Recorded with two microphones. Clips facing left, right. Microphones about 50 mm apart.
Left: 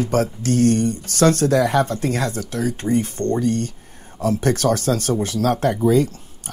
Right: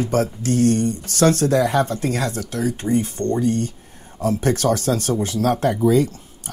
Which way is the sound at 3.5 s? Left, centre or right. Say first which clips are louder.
Even; left.